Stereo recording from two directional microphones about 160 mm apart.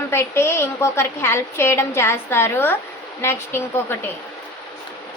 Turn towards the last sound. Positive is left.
turn(degrees=15)  # may be behind; listen again after turning